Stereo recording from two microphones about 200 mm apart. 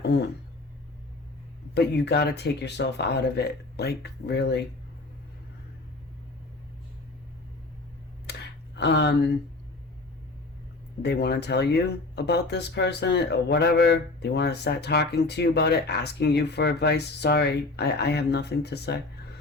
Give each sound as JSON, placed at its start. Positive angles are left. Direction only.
{"t": 1.7, "sound": "speech", "side_deg": 55}
{"t": 8.3, "sound": "a sound", "side_deg": 55}
{"t": 11.0, "sound": "speech", "side_deg": 55}